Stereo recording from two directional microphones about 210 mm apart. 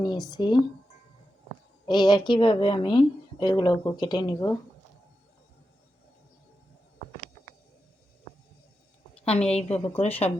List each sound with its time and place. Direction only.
0.0 s a woman's voice: 20° left (ahead or behind)
1.9 s a woman's voice: 20° left (ahead or behind)
9.3 s a woman's voice: 30° left (ahead or behind)
9.7 s a woman's voice: 10° left (ahead or behind)
10.0 s a woman's voice: 30° left (ahead or behind)